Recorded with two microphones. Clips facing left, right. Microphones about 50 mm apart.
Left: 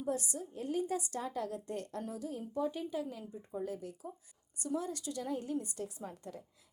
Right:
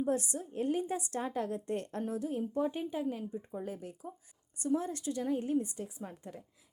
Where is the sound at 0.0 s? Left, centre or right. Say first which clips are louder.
Right 4 dB; right.